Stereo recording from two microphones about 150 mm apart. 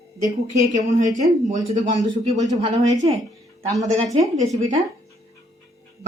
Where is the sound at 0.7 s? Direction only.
55° right (ahead or behind).